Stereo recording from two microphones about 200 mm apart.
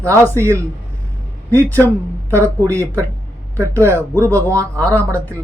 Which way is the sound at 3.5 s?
15° right (ahead or behind).